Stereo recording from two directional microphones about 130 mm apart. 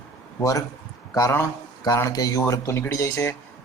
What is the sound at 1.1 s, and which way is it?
A man's voice, 25° left (ahead or behind).